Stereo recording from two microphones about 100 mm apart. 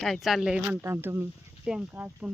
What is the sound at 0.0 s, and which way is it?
Speech, centre (ahead or behind).